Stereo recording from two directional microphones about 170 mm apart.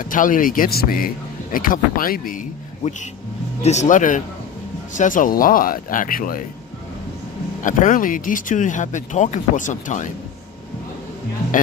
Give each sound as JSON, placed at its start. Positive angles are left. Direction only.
{"t": 0.0, "sound": "a man's voice", "side_deg": 50}
{"t": 7.6, "sound": "speech", "side_deg": 50}